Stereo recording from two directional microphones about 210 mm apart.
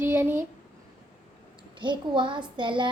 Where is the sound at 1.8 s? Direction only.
20° right (ahead or behind).